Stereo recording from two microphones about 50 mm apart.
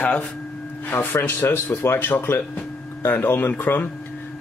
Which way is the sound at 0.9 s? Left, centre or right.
Left.